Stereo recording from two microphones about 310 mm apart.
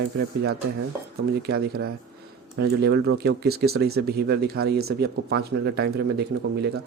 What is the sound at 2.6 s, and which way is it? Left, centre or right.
A man's voice, right.